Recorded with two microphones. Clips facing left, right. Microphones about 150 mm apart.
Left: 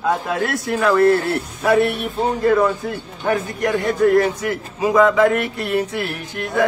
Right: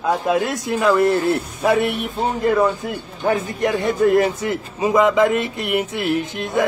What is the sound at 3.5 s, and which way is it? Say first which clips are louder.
A man's voice: even; 25° right (ahead or behind).